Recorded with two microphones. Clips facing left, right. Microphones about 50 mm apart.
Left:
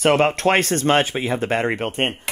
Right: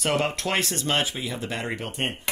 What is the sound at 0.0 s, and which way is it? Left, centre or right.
Speech, left.